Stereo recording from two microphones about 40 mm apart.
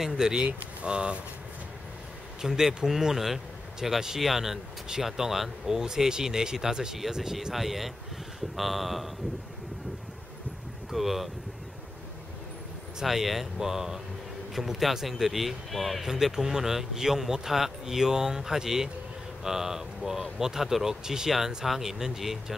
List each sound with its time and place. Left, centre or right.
0.0 s speech: centre
2.4 s speech: centre
10.9 s speech: centre
13.0 s speech: centre